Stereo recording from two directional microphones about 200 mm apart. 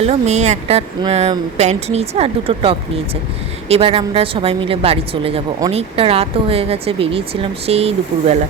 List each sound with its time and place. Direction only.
0.0 s a woman's voice: 35° right (ahead or behind)